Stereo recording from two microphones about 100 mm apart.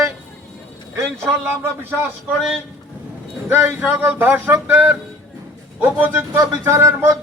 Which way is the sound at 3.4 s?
15° right (ahead or behind).